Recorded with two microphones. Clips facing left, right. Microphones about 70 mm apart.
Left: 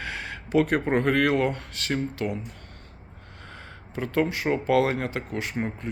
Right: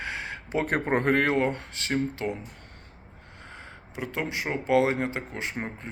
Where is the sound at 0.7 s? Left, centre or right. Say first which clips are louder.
Left 1 dB; right.